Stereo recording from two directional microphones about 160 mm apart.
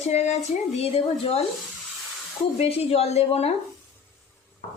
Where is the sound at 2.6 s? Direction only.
40° left (ahead or behind).